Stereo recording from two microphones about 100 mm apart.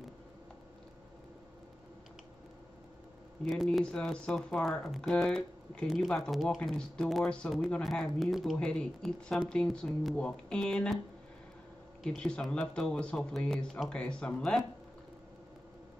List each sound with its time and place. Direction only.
3.4 s speech: centre (ahead or behind)
12.0 s speech: 5° left (ahead or behind)